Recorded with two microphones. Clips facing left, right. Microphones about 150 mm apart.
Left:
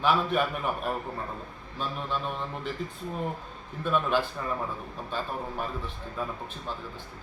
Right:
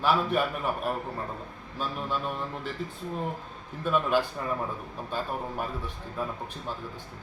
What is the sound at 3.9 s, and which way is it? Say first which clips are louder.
A man's voice: right 1 dB; 5° right (ahead or behind).